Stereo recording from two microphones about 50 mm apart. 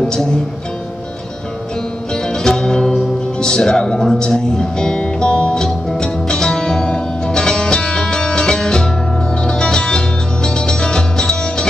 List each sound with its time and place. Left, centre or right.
0.0 s speech: centre
2.2 s music: centre